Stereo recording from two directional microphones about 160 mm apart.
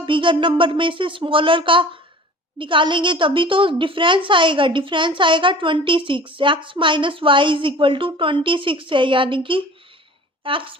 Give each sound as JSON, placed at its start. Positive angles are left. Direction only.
{"t": 0.0, "sound": "a woman's voice", "side_deg": -30}